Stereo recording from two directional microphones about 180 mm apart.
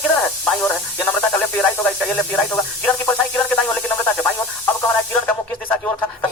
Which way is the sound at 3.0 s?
10° left (ahead or behind).